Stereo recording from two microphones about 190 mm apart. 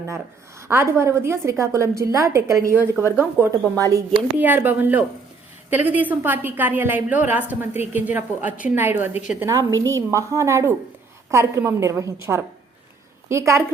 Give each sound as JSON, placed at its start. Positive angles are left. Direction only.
{"t": 0.7, "sound": "a woman's voice", "side_deg": -15}